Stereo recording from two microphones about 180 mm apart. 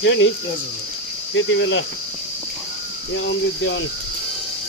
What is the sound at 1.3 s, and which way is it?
Speech, 90° left.